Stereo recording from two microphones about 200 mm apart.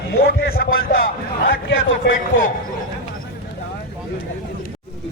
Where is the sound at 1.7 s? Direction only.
70° left (ahead or behind).